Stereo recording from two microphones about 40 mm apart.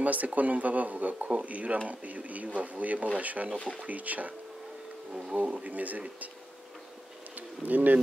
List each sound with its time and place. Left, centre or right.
0.0 s speech: right
5.3 s speech: right
7.3 s speech: right